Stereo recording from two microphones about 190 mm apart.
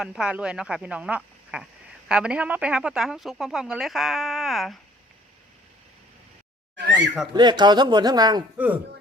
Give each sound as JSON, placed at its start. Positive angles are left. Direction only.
{"t": 0.0, "sound": "speech", "side_deg": -5}
{"t": 6.7, "sound": "speech", "side_deg": -70}
{"t": 7.3, "sound": "speech", "side_deg": -25}
{"t": 8.5, "sound": "speech", "side_deg": -10}